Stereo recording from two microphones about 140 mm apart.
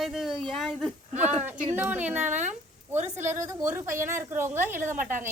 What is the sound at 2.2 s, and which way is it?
Speech, 60° right (ahead or behind).